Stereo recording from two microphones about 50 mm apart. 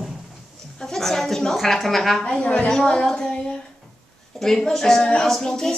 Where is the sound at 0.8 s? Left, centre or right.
Centre.